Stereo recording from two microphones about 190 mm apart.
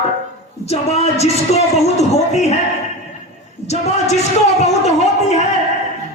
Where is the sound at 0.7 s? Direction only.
35° left (ahead or behind).